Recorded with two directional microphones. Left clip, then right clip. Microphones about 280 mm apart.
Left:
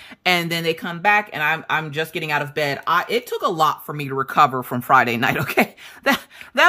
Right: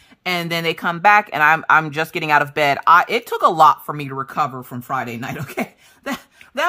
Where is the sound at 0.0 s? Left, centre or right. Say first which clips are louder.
Left 3 dB; centre.